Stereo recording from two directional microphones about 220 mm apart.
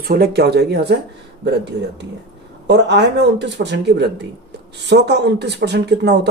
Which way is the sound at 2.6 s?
50° right (ahead or behind).